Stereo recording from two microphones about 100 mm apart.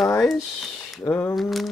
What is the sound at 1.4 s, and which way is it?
Speech, centre (ahead or behind).